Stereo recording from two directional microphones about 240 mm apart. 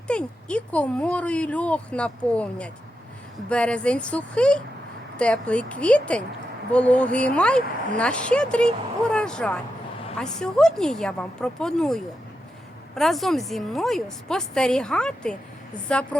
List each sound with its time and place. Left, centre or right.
0.1 s speech: centre